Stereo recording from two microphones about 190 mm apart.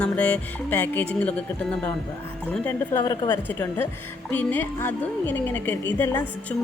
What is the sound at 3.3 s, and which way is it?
Speech, 10° left (ahead or behind).